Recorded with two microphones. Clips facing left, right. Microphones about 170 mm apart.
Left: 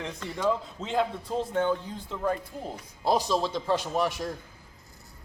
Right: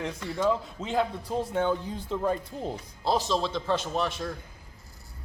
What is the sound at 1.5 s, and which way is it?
Speech, 15° right (ahead or behind).